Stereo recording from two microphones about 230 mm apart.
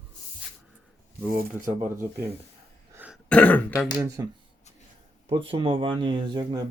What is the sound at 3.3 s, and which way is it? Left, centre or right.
Throat clearing, centre.